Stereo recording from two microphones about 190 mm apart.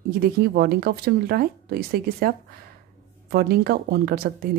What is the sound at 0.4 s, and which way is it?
A woman's voice, 55° right (ahead or behind).